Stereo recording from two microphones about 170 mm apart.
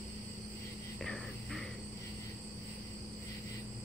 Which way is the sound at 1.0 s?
Centre (ahead or behind).